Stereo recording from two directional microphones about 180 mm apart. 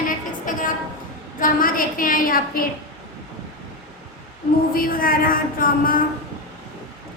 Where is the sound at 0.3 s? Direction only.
50° left (ahead or behind).